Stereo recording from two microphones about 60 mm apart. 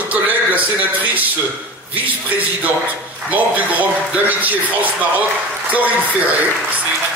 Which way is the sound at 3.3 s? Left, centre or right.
Right.